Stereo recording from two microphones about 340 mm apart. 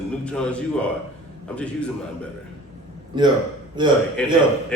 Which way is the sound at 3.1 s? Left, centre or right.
Centre.